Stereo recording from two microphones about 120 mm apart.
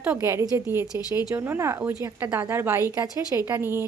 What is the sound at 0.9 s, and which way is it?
Speech, 30° left (ahead or behind).